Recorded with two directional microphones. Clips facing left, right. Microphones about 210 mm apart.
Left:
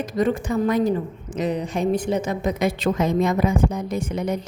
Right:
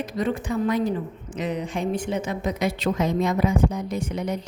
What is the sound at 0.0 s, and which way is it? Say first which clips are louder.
A woman's voice: left 4 dB; 45° left (ahead or behind).